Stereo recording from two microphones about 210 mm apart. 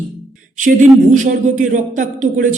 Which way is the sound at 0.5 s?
35° right (ahead or behind).